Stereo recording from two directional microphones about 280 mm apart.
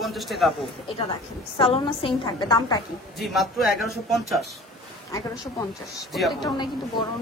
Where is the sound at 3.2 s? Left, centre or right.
Centre.